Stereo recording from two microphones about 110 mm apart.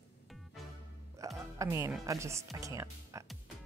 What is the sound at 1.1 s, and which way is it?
Music, 30° right (ahead or behind).